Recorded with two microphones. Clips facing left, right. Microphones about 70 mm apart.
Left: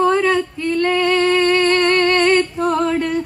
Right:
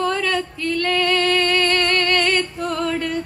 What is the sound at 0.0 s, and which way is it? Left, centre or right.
Female singing, left.